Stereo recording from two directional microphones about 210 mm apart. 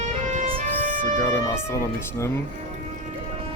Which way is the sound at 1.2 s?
15° left (ahead or behind).